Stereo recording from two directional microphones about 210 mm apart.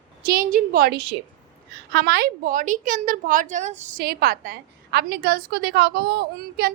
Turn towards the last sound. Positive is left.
turn(degrees=-50)  # may be behind; listen again after turning